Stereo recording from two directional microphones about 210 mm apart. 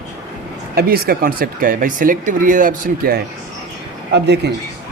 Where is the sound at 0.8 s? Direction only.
45° right (ahead or behind).